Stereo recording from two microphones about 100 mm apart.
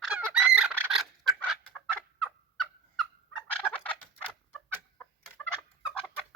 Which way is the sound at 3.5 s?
10° left (ahead or behind).